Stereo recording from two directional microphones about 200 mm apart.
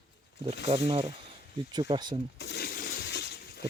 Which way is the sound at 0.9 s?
25° right (ahead or behind).